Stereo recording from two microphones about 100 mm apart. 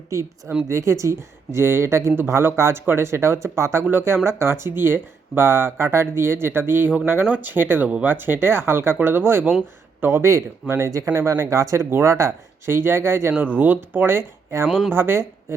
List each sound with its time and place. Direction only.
0.1 s speech: 30° right (ahead or behind)
14.7 s speech: centre (ahead or behind)
14.9 s speech: 25° right (ahead or behind)